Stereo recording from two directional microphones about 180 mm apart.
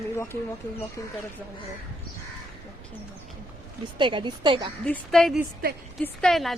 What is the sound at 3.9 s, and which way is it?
Speech, 25° right (ahead or behind).